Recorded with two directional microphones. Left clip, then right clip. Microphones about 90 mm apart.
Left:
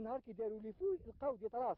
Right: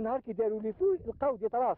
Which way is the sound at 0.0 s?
35° left (ahead or behind).